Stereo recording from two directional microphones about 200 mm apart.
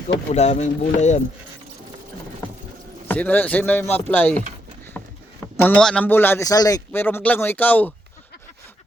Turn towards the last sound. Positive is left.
turn(degrees=10)  # may be behind; listen again after turning